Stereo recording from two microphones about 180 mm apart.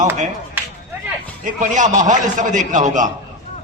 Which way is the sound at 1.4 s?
45° right (ahead or behind).